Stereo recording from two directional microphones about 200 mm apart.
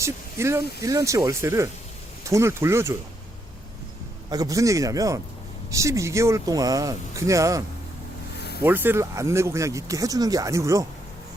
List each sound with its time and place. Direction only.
0.0 s speech: 15° right (ahead or behind)
4.3 s speech: 15° right (ahead or behind)
8.4 s vehicle: 55° left (ahead or behind)
8.6 s speech: 10° right (ahead or behind)